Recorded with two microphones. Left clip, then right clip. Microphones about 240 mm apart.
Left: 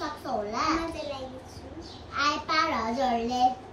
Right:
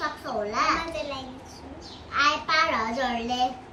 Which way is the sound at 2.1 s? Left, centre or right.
Centre.